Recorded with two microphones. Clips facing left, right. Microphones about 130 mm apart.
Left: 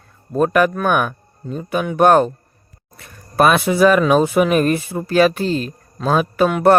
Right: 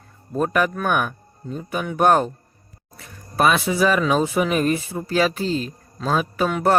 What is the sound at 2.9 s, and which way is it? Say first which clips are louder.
Speech: left 5 dB; 60° left (ahead or behind).